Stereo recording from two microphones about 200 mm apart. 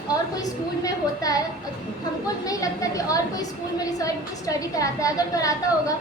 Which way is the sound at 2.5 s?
15° left (ahead or behind).